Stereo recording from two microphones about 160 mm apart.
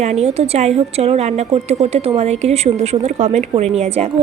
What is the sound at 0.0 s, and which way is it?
Speech, 40° right (ahead or behind).